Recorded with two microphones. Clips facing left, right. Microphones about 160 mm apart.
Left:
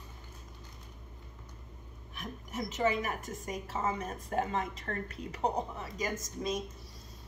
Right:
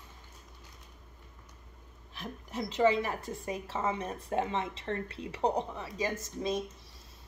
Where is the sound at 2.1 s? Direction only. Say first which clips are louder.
Right 1 dB; 30° right (ahead or behind).